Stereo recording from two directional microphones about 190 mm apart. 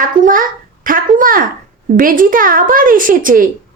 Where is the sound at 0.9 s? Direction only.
45° right (ahead or behind).